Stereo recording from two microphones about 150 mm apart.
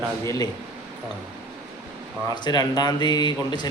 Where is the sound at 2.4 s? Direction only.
25° left (ahead or behind).